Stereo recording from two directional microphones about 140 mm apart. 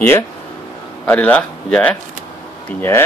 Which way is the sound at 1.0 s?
10° left (ahead or behind).